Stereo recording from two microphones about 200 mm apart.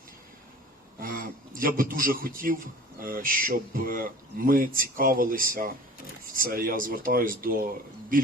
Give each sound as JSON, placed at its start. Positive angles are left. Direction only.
{"t": 0.9, "sound": "speech", "side_deg": -45}